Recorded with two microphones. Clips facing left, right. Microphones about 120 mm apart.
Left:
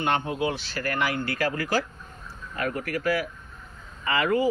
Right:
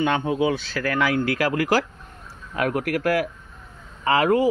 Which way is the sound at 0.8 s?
90° right.